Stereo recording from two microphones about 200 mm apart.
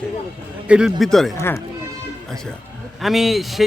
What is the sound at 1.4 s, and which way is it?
Speech, 15° left (ahead or behind).